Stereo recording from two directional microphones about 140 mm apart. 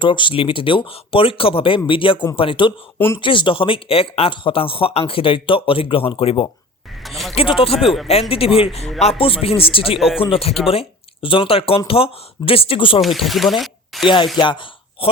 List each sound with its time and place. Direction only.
0.0 s speech: 35° left (ahead or behind)
7.0 s a sound: centre (ahead or behind)
7.3 s speech: 40° left (ahead or behind)
13.0 s speech: centre (ahead or behind)
14.3 s speech: 35° left (ahead or behind)